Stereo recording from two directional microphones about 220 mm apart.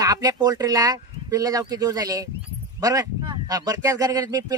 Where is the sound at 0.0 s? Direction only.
15° right (ahead or behind).